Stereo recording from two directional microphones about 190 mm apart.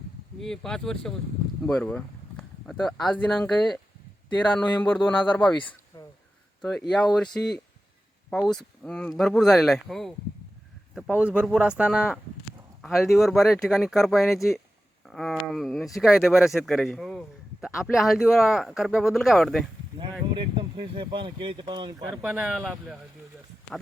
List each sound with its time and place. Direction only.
0.3 s speech: 5° left (ahead or behind)
5.9 s a sound: 20° left (ahead or behind)
6.6 s speech: centre (ahead or behind)
8.4 s speech: 5° left (ahead or behind)
20.0 s speech: 25° right (ahead or behind)
22.2 s speech: 5° right (ahead or behind)